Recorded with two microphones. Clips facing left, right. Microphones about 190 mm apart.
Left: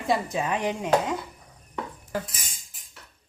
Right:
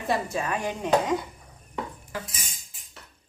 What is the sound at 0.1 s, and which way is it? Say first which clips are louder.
Speech: left 2 dB; 20° left (ahead or behind).